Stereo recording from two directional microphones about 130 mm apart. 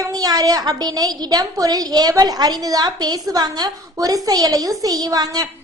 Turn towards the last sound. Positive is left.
turn(degrees=-30)  # may be behind; listen again after turning